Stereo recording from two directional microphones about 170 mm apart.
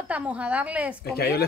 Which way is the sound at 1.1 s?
70° left (ahead or behind).